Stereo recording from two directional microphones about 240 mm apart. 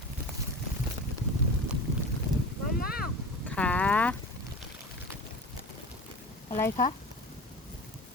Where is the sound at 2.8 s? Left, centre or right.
Left.